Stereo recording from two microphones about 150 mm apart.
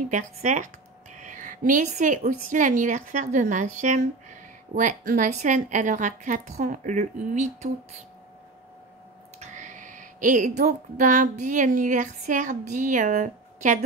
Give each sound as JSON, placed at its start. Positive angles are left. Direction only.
{"t": 0.0, "sound": "a woman's voice", "side_deg": -55}
{"t": 9.4, "sound": "speech", "side_deg": -55}